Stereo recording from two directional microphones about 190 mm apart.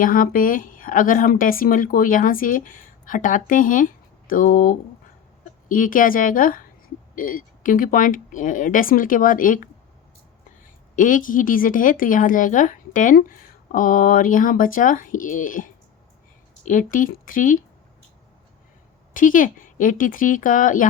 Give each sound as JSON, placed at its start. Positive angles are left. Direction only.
{"t": 0.0, "sound": "speech", "side_deg": 45}
{"t": 10.9, "sound": "speech", "side_deg": 45}
{"t": 19.1, "sound": "speech", "side_deg": 45}